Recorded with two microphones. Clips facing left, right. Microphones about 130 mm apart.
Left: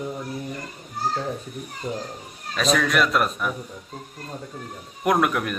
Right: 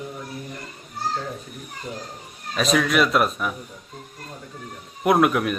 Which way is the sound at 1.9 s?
50° left (ahead or behind).